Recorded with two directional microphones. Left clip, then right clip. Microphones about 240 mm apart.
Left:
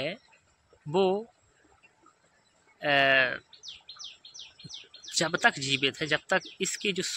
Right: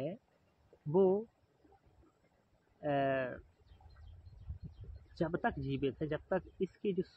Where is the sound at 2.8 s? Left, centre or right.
Centre.